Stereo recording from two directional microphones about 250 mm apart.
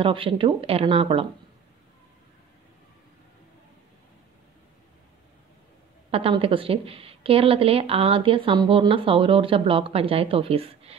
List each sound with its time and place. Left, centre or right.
0.0 s a woman's voice: right
6.0 s a woman's voice: right